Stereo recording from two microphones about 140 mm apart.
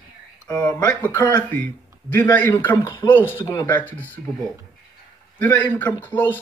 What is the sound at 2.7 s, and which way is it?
Speech, 25° left (ahead or behind).